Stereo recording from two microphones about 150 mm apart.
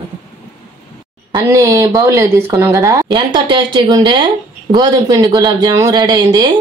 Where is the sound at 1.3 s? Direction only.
20° right (ahead or behind).